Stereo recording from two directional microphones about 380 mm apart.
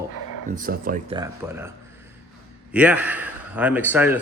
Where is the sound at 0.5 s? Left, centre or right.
Right.